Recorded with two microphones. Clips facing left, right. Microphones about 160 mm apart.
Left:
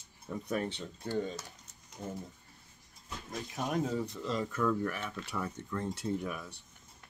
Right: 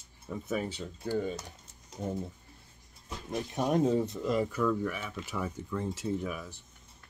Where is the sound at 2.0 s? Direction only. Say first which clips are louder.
Right 6 dB; 20° right (ahead or behind).